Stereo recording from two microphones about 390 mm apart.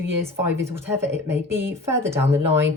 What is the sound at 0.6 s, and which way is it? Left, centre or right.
Speech, centre.